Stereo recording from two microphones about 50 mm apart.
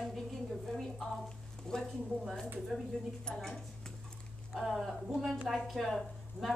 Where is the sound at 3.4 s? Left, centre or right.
Centre.